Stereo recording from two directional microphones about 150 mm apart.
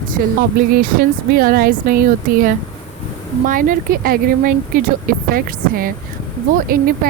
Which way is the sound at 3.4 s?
65° right (ahead or behind).